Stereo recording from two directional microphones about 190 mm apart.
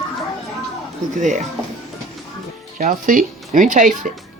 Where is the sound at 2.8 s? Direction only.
45° right (ahead or behind).